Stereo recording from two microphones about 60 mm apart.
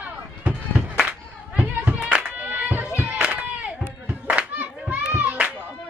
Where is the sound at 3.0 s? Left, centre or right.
Right.